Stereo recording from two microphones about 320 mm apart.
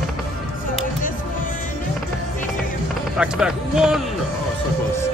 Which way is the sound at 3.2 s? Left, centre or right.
Centre.